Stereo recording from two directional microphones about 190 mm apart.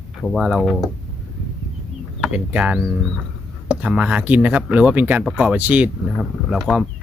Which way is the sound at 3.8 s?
5° right (ahead or behind).